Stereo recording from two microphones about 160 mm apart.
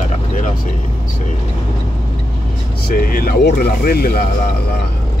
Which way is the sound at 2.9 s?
65° left (ahead or behind).